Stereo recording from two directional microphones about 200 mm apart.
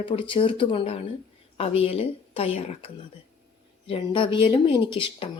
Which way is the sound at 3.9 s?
25° left (ahead or behind).